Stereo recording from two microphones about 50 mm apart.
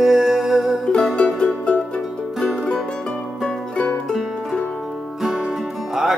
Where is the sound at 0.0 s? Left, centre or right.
Centre.